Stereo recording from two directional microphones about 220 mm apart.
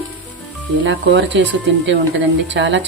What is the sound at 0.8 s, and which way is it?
Speech, 55° right (ahead or behind).